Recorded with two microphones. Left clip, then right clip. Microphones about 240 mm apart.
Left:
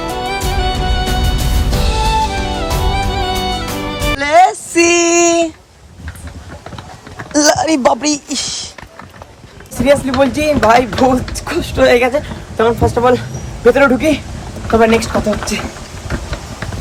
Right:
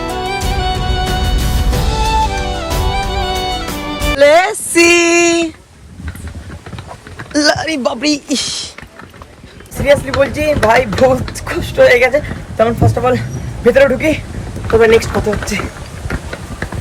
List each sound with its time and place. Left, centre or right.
0.0 s music: centre
7.3 s a sound: centre
8.0 s speech: centre
9.8 s speech: centre